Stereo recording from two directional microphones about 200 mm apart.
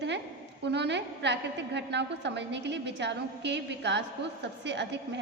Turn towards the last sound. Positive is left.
turn(degrees=-60)  # may be behind; listen again after turning